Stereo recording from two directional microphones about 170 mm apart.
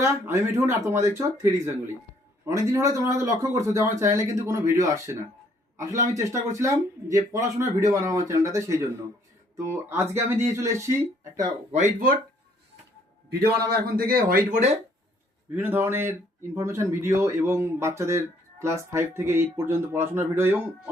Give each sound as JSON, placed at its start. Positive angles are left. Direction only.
{"t": 0.0, "sound": "speech", "side_deg": -15}
{"t": 11.7, "sound": "speech", "side_deg": -50}
{"t": 13.4, "sound": "a man's voice", "side_deg": -65}
{"t": 15.5, "sound": "speech", "side_deg": -10}